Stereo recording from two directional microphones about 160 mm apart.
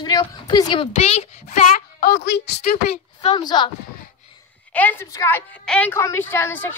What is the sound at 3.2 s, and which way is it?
Speech, 30° left (ahead or behind).